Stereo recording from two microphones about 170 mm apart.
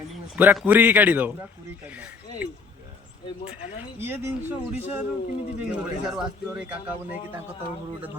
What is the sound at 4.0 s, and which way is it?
Speech, 10° right (ahead or behind).